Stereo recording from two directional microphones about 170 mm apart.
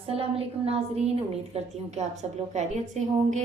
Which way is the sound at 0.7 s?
35° right (ahead or behind).